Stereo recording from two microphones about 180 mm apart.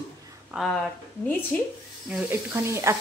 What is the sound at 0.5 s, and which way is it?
Speech, 5° right (ahead or behind).